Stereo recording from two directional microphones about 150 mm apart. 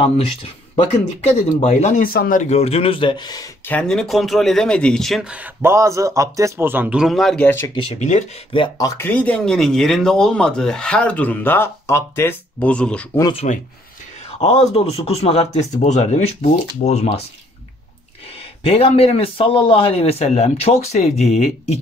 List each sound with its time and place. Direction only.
1.6 s speech: 50° left (ahead or behind)
2.1 s speech: 65° left (ahead or behind); by 3.4 s 30° left (ahead or behind)
3.6 s speech: 5° left (ahead or behind)
7.6 s speech: 35° left (ahead or behind)
8.5 s speech: 25° left (ahead or behind); by 13.0 s 5° left (ahead or behind)
13.4 s speech: 60° left (ahead or behind)
14.4 s speech: 45° left (ahead or behind)
18.6 s speech: 40° left (ahead or behind)